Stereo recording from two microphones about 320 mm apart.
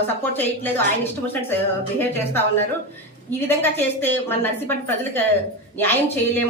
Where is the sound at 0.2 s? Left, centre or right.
Centre.